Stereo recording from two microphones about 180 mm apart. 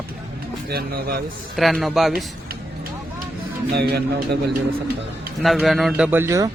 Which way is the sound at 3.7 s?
65° right (ahead or behind).